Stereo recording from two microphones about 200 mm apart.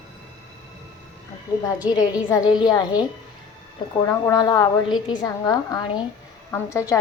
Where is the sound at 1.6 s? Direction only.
20° left (ahead or behind).